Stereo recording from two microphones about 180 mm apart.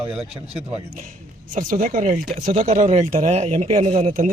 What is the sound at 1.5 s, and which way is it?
A man's voice, 50° right (ahead or behind).